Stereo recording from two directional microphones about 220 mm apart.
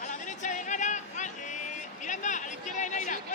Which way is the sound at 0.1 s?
35° left (ahead or behind).